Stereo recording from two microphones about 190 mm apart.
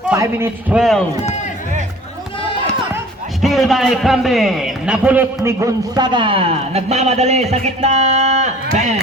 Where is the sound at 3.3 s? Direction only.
Centre (ahead or behind); by 8.5 s 35° right (ahead or behind).